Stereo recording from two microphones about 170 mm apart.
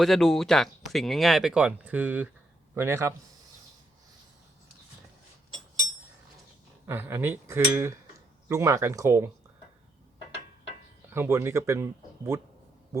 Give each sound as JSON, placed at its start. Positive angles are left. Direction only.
{"t": 0.0, "sound": "speech", "side_deg": 0}
{"t": 6.8, "sound": "speech", "side_deg": -15}
{"t": 11.1, "sound": "speech", "side_deg": -15}